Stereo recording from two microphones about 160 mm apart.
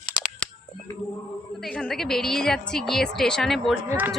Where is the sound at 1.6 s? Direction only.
5° left (ahead or behind).